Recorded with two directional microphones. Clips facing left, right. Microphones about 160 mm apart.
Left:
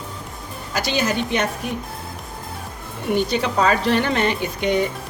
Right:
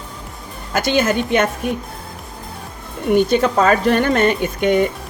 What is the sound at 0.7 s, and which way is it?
Speech, 50° right (ahead or behind).